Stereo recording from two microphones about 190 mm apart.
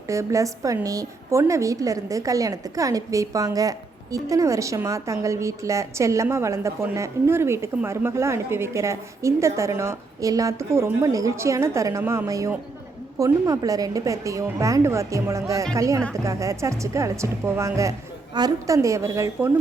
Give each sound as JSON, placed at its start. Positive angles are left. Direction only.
{"t": 0.1, "sound": "a woman's voice", "side_deg": -15}